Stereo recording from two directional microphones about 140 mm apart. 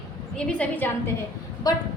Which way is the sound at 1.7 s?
30° left (ahead or behind).